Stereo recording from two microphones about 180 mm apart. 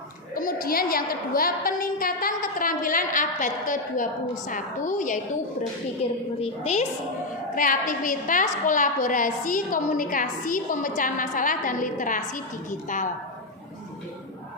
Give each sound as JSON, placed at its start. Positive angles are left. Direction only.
{"t": 0.3, "sound": "a woman's voice", "side_deg": 50}
{"t": 7.5, "sound": "a woman's voice", "side_deg": 50}